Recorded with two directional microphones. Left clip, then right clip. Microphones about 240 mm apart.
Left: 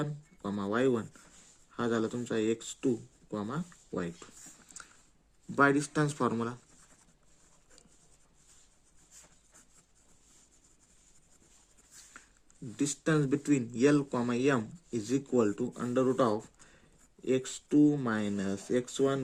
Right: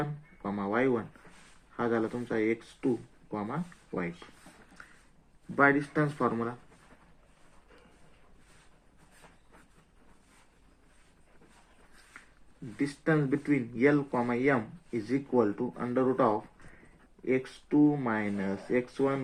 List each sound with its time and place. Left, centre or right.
0.0 s a sound: left
1.7 s speech: left
5.5 s speech: left
12.7 s speech: left
15.3 s speech: left